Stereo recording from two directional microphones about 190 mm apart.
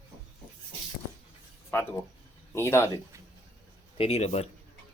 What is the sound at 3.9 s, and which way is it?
Speech, 30° left (ahead or behind).